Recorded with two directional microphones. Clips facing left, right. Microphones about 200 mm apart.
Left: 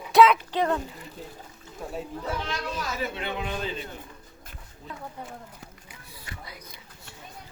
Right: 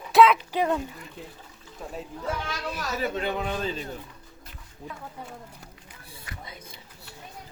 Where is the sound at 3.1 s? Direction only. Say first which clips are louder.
Right 3 dB; 40° right (ahead or behind).